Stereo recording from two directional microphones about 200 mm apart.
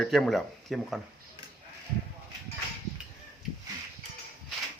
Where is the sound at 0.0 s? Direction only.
Centre (ahead or behind).